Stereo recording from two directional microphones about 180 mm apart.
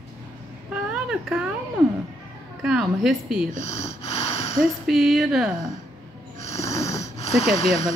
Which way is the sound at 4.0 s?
35° left (ahead or behind).